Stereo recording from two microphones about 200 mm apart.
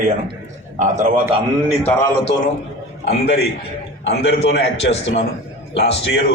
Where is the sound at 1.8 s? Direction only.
10° left (ahead or behind).